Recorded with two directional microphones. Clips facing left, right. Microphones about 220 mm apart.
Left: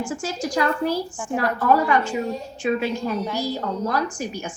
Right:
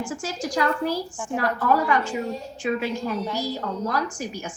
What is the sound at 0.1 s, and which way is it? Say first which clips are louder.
A woman's voice: left 2 dB; 25° left (ahead or behind).